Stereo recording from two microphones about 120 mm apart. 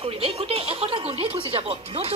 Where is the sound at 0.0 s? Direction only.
50° right (ahead or behind).